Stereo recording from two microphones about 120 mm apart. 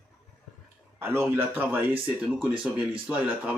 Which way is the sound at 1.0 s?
20° right (ahead or behind).